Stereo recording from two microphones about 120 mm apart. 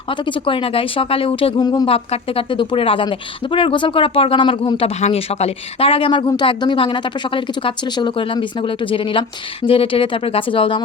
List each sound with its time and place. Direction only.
0.1 s speech: 45° left (ahead or behind)
1.5 s speech: 35° left (ahead or behind)
1.9 s speech: 50° left (ahead or behind)
4.9 s speech: 65° left (ahead or behind); by 10.8 s 45° left (ahead or behind)